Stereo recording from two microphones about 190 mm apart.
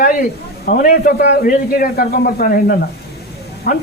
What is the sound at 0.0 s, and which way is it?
A man's voice, 45° left (ahead or behind).